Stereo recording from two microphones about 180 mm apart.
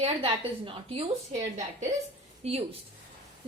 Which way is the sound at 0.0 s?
30° right (ahead or behind).